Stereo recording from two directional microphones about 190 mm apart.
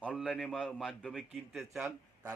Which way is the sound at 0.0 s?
5° left (ahead or behind).